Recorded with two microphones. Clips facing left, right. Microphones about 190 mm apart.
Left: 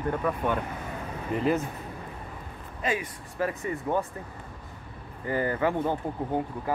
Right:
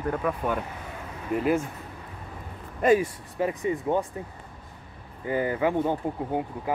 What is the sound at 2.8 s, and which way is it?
Speech, 45° right (ahead or behind).